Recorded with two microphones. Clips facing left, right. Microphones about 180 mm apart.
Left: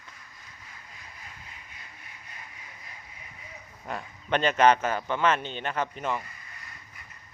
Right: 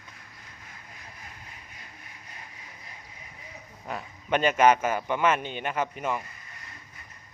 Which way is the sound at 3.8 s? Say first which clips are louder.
Even; 5° right (ahead or behind).